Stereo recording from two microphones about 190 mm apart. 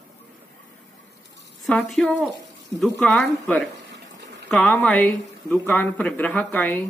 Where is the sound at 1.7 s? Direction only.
Centre (ahead or behind).